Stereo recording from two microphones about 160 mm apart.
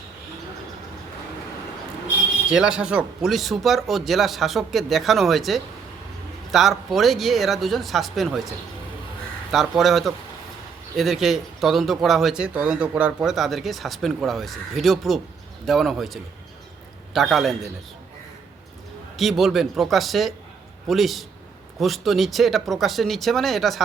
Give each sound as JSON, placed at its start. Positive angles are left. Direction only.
{"t": 2.5, "sound": "speech", "side_deg": -5}
{"t": 19.1, "sound": "speech", "side_deg": 0}